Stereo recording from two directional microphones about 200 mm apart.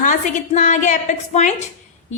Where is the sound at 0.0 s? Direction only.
40° left (ahead or behind).